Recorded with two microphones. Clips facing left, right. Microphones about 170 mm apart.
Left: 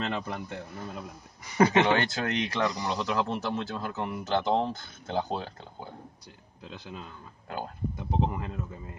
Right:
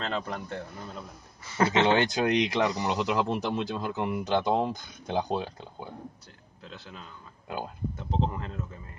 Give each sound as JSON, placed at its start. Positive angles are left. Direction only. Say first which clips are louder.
{"t": 0.0, "sound": "speech", "louder": "even", "side_deg": 10}
{"t": 1.9, "sound": "speech", "louder": "right 3 dB", "side_deg": -20}
{"t": 6.6, "sound": "speech", "louder": "left 3 dB", "side_deg": 15}
{"t": 7.4, "sound": "speech", "louder": "right 1 dB", "side_deg": -15}
{"t": 7.9, "sound": "speech", "louder": "left 1 dB", "side_deg": 10}